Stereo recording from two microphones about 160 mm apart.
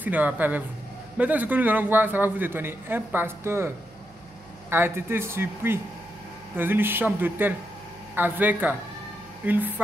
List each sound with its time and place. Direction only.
0.0 s a man's voice: 10° right (ahead or behind)